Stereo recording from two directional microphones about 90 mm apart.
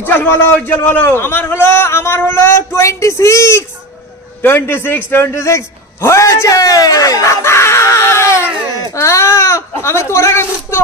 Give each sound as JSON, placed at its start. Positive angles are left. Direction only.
{"t": 0.0, "sound": "a man's voice", "side_deg": 20}